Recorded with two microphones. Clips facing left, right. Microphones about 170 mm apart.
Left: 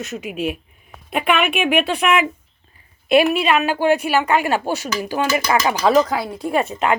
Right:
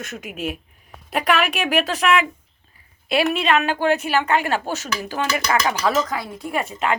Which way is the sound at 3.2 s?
10° left (ahead or behind).